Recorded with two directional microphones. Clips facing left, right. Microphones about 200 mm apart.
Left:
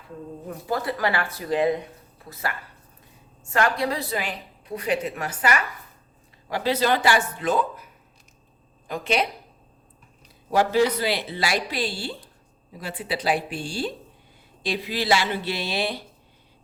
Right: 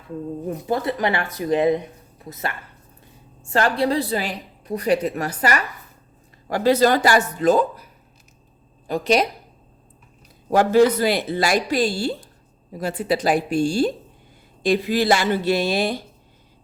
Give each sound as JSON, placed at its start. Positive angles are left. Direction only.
{"t": 0.4, "sound": "a woman's voice", "side_deg": -20}
{"t": 8.9, "sound": "a woman's voice", "side_deg": -40}
{"t": 10.5, "sound": "speech", "side_deg": -50}